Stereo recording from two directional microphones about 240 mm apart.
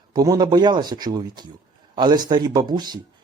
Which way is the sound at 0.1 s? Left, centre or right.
Centre.